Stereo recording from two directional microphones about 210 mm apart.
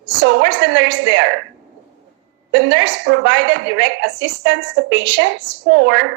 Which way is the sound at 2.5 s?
60° right (ahead or behind).